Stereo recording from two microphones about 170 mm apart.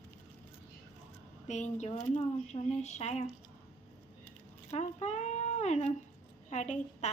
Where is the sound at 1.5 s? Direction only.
45° left (ahead or behind).